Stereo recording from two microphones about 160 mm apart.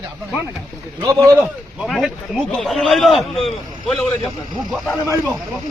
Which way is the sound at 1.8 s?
Centre (ahead or behind).